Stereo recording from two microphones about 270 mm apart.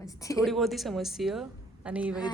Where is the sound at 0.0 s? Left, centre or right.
Centre.